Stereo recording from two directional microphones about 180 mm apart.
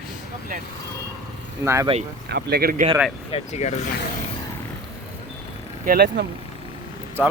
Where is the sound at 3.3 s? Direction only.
35° left (ahead or behind).